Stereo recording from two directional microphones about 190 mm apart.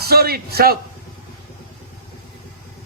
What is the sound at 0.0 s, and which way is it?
Speech, 55° right (ahead or behind).